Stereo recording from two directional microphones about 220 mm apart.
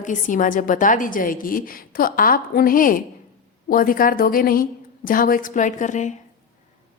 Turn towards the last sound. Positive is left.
turn(degrees=35)  # may be behind; listen again after turning